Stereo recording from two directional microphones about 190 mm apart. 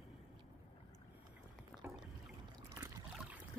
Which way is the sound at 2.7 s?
10° right (ahead or behind).